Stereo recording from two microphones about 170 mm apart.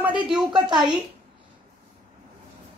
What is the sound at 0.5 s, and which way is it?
Speech, 25° right (ahead or behind).